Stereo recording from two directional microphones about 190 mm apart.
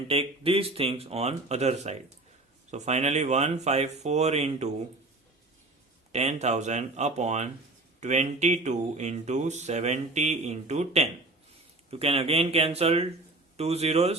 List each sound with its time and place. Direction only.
0.1 s speech: 30° right (ahead or behind)
6.1 s speech: 35° right (ahead or behind)